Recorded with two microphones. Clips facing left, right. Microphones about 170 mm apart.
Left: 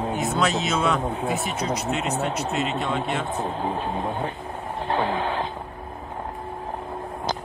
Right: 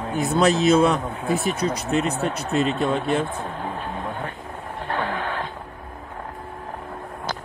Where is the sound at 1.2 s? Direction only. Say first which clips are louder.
Right 3 dB; 20° left (ahead or behind).